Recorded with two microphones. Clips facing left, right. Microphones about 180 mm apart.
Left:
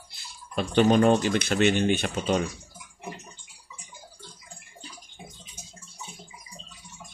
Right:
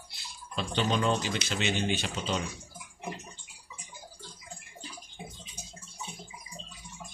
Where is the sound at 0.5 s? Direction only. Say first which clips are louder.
Left 9 dB; 55° left (ahead or behind).